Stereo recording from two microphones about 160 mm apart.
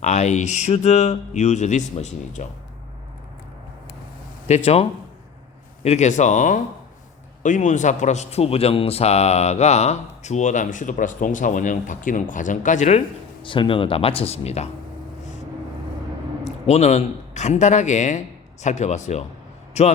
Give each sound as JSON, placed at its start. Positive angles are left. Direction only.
{"t": 0.0, "sound": "a man's voice", "side_deg": 45}
{"t": 4.4, "sound": "a man's voice", "side_deg": 40}
{"t": 13.4, "sound": "speech", "side_deg": 30}
{"t": 16.4, "sound": "a man's voice", "side_deg": 45}